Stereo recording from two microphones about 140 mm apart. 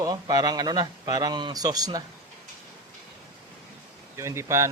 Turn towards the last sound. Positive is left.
turn(degrees=-20)  # may be behind; listen again after turning